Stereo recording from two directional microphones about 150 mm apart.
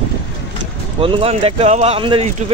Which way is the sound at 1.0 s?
40° right (ahead or behind).